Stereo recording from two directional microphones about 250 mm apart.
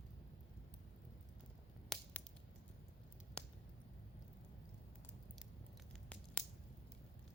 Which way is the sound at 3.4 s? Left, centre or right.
Centre.